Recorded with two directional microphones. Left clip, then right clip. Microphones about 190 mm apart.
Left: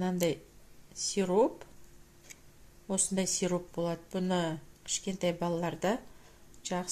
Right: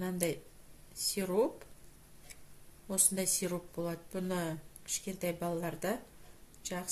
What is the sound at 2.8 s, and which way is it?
Speech, 40° left (ahead or behind).